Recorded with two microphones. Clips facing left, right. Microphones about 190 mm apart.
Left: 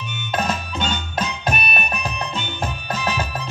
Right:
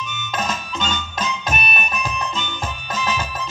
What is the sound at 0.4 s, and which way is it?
Music, 60° left (ahead or behind).